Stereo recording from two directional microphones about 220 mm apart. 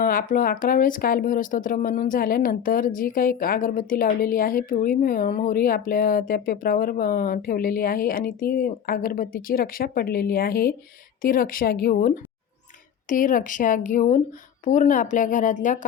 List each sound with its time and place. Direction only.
0.0 s speech: 40° left (ahead or behind)